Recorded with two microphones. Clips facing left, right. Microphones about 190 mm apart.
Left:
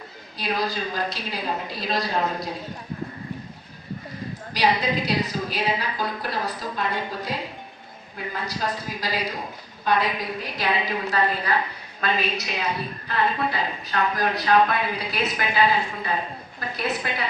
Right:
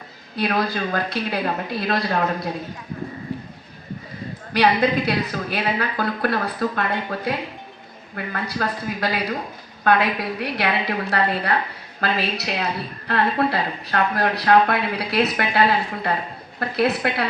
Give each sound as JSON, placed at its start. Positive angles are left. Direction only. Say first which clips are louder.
{"t": 0.3, "sound": "a woman's voice", "louder": "right 4 dB", "side_deg": -60}
{"t": 4.5, "sound": "a woman's voice", "louder": "right 5 dB", "side_deg": -55}